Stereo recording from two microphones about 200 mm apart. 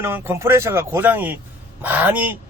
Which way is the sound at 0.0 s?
10° right (ahead or behind).